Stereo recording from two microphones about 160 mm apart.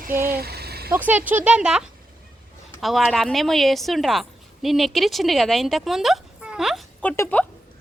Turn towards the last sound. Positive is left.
turn(degrees=15)  # may be behind; listen again after turning